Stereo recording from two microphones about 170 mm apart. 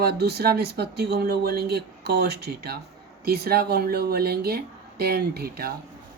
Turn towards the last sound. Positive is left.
turn(degrees=-65)  # may be behind; listen again after turning